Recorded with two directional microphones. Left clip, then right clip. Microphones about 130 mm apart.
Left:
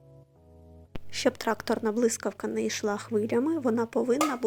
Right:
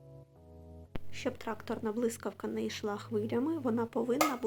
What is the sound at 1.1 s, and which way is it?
A woman's voice, 65° left (ahead or behind).